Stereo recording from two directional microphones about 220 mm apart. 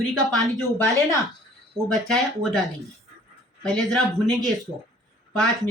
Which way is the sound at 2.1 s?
Centre (ahead or behind).